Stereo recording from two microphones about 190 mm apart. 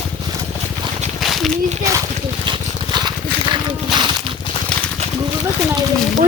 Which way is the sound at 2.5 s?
25° right (ahead or behind).